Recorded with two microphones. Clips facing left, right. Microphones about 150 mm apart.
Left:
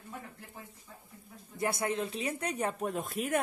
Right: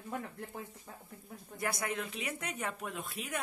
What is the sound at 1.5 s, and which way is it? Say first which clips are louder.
Speech: left 5 dB; 25° left (ahead or behind).